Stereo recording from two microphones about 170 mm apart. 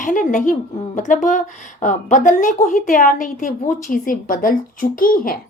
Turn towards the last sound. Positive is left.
turn(degrees=55)  # may be behind; listen again after turning